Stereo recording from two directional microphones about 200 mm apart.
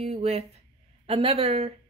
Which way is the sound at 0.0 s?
30° right (ahead or behind).